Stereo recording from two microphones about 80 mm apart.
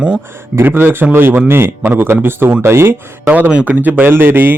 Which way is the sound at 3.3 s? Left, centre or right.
Centre.